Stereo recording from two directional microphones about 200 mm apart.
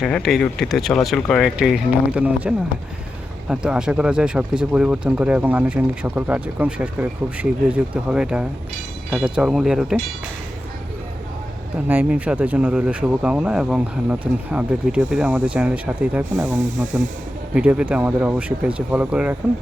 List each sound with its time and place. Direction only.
0.0 s speech: centre (ahead or behind)
11.9 s speech: 10° right (ahead or behind)